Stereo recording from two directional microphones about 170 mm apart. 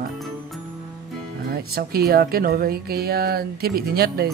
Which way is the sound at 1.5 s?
65° right (ahead or behind).